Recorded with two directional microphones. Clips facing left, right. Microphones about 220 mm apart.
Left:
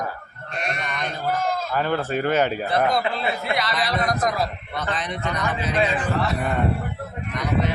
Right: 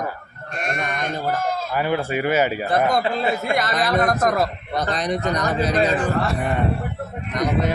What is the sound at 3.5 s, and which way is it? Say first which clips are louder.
A man's voice: right 4 dB; 50° right (ahead or behind).